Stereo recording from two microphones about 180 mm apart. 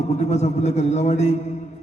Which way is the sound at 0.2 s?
40° left (ahead or behind).